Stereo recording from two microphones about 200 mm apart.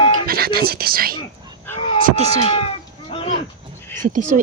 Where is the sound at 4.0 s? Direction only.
40° right (ahead or behind).